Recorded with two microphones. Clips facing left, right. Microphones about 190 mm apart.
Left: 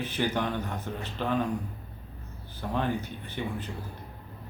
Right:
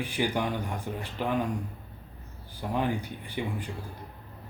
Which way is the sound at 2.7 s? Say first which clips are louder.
Right 1 dB; 10° right (ahead or behind).